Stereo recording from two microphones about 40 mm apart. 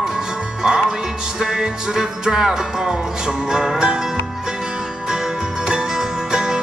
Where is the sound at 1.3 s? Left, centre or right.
Centre.